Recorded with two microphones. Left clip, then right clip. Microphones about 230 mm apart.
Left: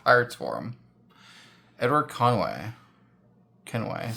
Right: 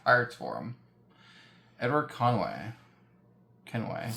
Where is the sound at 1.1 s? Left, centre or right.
Left.